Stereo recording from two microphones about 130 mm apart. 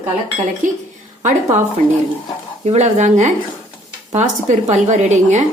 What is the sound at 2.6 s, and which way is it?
A woman's voice, 60° right (ahead or behind).